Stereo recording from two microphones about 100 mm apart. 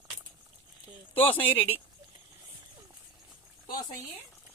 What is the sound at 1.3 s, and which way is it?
Speech, 20° left (ahead or behind).